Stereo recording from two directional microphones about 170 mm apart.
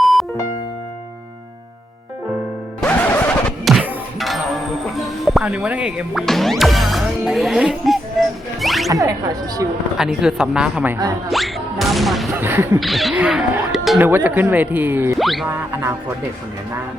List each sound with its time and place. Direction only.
0.0 s music: centre (ahead or behind)
2.8 s music: 10° left (ahead or behind)
3.6 s music: centre (ahead or behind)
4.9 s speech: centre (ahead or behind)
8.6 s music: centre (ahead or behind)
8.9 s speech: 20° right (ahead or behind)
10.0 s speech: 5° right (ahead or behind)
11.3 s music: centre (ahead or behind)
12.3 s speech: 10° right (ahead or behind)
12.8 s speech: centre (ahead or behind)
15.2 s music: centre (ahead or behind)
15.4 s speech: 15° right (ahead or behind)